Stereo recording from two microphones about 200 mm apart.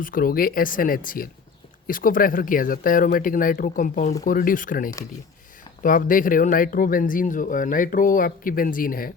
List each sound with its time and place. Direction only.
0.0 s speech: 45° left (ahead or behind)